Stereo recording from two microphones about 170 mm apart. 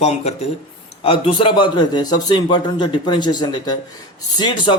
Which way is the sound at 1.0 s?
30° left (ahead or behind).